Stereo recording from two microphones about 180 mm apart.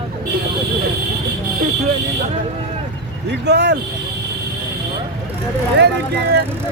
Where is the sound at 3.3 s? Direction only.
70° right (ahead or behind).